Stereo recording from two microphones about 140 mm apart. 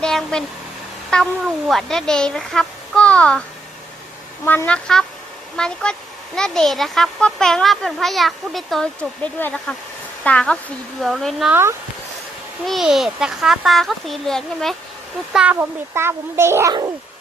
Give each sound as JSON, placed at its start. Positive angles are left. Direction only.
{"t": 0.0, "sound": "a sound", "side_deg": 5}
{"t": 1.1, "sound": "speech", "side_deg": 5}
{"t": 4.4, "sound": "speech", "side_deg": 10}
{"t": 12.6, "sound": "speech", "side_deg": 0}
{"t": 15.3, "sound": "a child's voice", "side_deg": -10}